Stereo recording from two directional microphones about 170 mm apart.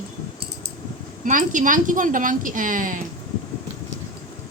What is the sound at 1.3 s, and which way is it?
Speech, 50° right (ahead or behind).